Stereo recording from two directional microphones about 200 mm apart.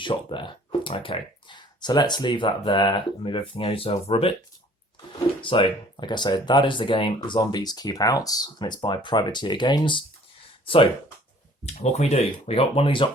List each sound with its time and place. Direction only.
0.0 s speech: 25° left (ahead or behind)
5.4 s speech: 25° left (ahead or behind)
11.6 s speech: 35° left (ahead or behind)